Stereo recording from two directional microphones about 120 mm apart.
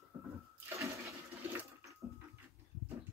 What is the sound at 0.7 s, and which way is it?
Toilet flush, 25° right (ahead or behind).